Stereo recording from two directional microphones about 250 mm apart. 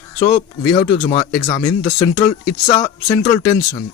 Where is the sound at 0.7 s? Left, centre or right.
Centre.